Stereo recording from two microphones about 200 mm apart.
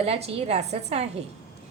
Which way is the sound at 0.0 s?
30° right (ahead or behind).